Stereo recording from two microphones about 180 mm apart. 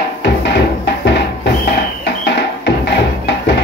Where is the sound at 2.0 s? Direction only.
75° left (ahead or behind).